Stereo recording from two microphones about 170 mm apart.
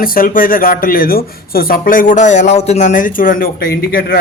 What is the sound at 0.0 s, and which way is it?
Speech, 55° left (ahead or behind).